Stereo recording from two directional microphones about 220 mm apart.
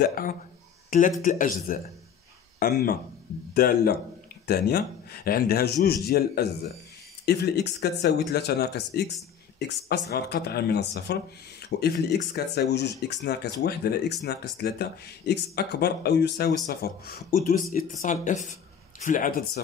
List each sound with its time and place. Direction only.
0.0 s speech: 40° left (ahead or behind)